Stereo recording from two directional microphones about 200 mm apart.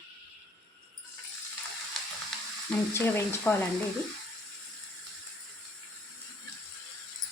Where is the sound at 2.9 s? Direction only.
10° left (ahead or behind).